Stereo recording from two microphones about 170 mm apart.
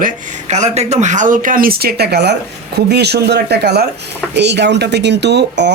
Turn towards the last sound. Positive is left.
turn(degrees=-90)